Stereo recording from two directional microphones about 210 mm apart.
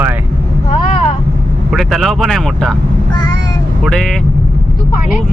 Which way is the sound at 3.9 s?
Centre (ahead or behind).